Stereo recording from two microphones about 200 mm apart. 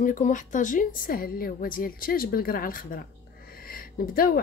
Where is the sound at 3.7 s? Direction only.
45° left (ahead or behind).